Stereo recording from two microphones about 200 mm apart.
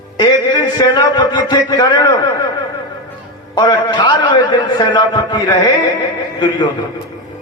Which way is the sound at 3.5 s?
20° left (ahead or behind).